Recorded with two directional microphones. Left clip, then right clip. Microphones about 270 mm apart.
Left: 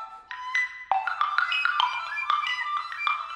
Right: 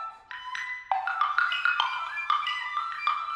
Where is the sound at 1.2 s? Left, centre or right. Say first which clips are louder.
Right 2 dB; centre.